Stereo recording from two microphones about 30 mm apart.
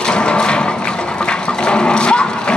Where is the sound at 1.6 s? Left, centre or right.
Left.